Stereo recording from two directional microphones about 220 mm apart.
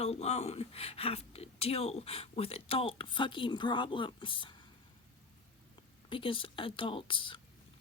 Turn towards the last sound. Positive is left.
turn(degrees=20)  # may be behind; listen again after turning